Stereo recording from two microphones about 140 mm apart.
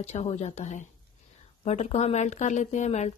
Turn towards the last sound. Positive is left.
turn(degrees=55)  # may be behind; listen again after turning